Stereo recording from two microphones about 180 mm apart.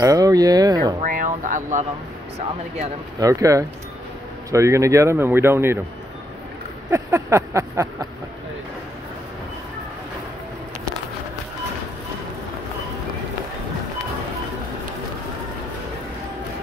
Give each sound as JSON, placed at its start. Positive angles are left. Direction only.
{"t": 0.0, "sound": "speech", "side_deg": -20}
{"t": 1.0, "sound": "a sound", "side_deg": -45}
{"t": 3.2, "sound": "speech", "side_deg": -15}
{"t": 6.9, "sound": "speech", "side_deg": -15}